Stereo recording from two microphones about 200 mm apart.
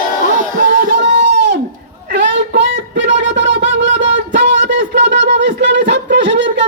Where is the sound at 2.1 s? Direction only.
60° right (ahead or behind).